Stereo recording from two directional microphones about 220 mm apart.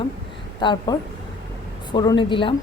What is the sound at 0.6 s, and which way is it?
A woman's voice, 20° left (ahead or behind).